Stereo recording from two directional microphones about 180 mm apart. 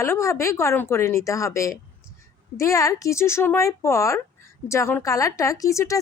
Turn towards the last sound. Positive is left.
turn(degrees=15)  # may be behind; listen again after turning